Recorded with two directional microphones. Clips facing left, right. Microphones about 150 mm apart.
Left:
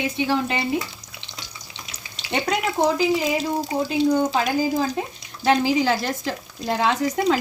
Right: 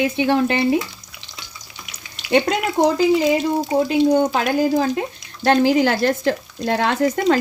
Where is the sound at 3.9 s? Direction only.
60° right (ahead or behind).